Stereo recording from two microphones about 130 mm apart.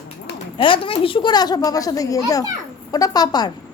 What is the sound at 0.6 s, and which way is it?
A woman's voice, 40° left (ahead or behind).